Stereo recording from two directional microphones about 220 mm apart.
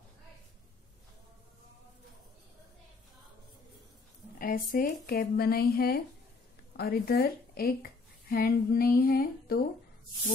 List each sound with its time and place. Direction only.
4.4 s a woman's voice: 40° left (ahead or behind)